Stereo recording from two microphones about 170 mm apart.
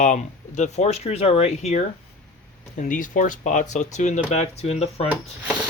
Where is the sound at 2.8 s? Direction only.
50° left (ahead or behind).